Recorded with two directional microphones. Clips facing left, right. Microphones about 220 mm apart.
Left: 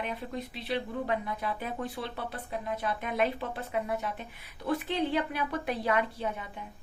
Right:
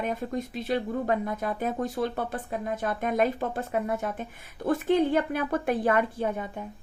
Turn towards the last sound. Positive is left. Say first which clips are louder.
# right 5 dB
turn(degrees=-50)  # may be behind; listen again after turning